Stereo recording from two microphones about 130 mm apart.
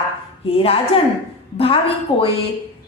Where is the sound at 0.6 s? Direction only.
45° left (ahead or behind).